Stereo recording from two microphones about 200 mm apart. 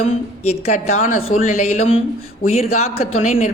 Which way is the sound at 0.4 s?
35° left (ahead or behind).